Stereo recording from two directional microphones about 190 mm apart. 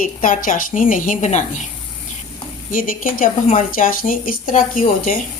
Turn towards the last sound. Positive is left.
turn(degrees=45)  # may be behind; listen again after turning